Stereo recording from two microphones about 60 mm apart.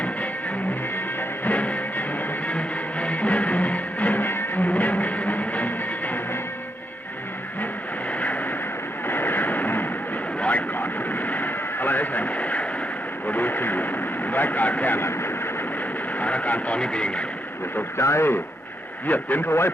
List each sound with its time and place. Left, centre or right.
1.5 s music: left
8.2 s vehicle: left
9.0 s a sound: left
13.2 s vehicle: left
14.9 s vehicle: left
16.1 s vehicle: left
17.9 s speech: left
19.0 s a man's voice: left